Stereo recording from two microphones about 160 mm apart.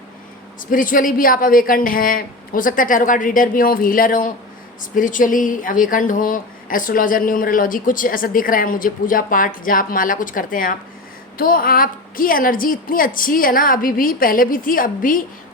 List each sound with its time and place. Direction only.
0.7 s speech: 55° left (ahead or behind)